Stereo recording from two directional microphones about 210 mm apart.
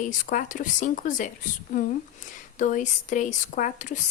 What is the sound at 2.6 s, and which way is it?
Speech, 35° left (ahead or behind).